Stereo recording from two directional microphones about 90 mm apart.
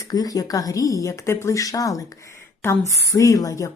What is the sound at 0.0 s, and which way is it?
A woman's voice, 45° left (ahead or behind).